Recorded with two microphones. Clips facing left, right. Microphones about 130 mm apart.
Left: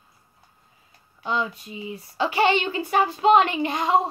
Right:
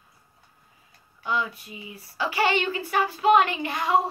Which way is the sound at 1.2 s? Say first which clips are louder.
Left 2 dB; 25° left (ahead or behind).